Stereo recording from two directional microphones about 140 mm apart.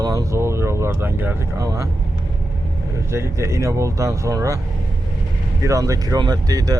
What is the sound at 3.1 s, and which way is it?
Speech, 20° right (ahead or behind).